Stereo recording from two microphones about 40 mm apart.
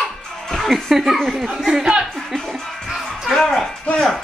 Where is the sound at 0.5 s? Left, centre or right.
Centre.